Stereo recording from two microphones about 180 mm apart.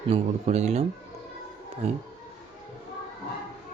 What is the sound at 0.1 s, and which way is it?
Speech, 35° right (ahead or behind).